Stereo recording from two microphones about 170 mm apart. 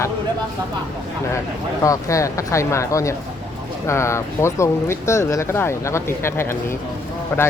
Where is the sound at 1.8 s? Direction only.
20° left (ahead or behind).